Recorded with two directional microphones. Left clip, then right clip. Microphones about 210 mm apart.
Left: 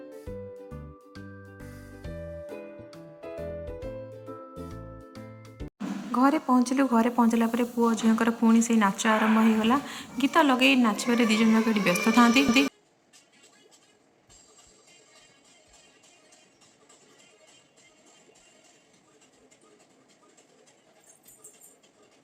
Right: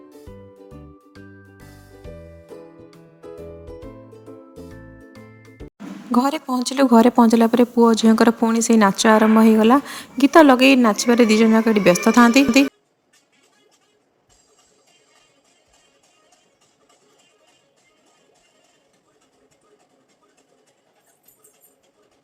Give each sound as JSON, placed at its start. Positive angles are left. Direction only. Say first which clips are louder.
{"t": 3.6, "sound": "music", "louder": "left 1 dB", "side_deg": 0}
{"t": 6.1, "sound": "speech", "louder": "right 3 dB", "side_deg": -45}